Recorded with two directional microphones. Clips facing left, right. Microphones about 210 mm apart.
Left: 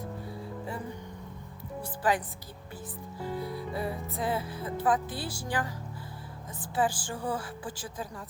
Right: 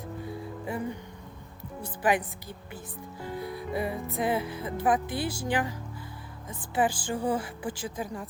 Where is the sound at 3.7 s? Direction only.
15° right (ahead or behind).